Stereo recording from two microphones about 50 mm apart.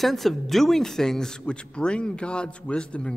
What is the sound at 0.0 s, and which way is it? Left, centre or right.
A man's voice, centre.